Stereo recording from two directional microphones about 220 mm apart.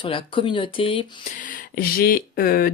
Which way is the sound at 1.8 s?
40° left (ahead or behind).